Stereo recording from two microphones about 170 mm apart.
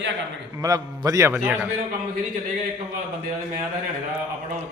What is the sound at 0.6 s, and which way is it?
A man's voice, 20° right (ahead or behind).